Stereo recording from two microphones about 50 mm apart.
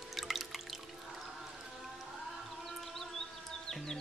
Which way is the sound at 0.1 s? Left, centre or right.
Centre.